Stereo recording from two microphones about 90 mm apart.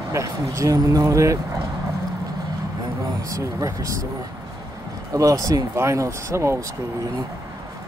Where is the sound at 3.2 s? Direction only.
40° right (ahead or behind).